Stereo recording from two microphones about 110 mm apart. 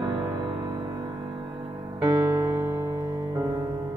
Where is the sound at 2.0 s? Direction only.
35° right (ahead or behind).